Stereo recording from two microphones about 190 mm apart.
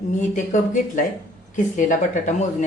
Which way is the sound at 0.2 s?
40° left (ahead or behind).